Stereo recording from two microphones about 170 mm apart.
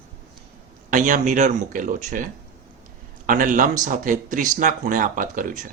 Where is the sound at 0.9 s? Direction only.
50° right (ahead or behind).